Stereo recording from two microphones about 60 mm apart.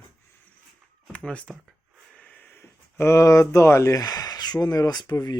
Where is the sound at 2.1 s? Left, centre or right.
Left.